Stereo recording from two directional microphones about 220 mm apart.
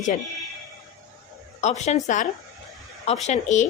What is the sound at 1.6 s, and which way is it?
Speech, 30° left (ahead or behind).